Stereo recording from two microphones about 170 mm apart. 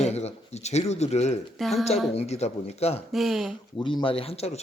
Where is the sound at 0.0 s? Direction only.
40° left (ahead or behind).